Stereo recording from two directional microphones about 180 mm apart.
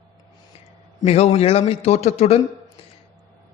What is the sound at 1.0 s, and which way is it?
A man's voice, 35° left (ahead or behind).